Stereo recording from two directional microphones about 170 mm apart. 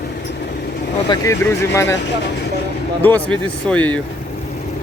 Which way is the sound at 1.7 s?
15° left (ahead or behind).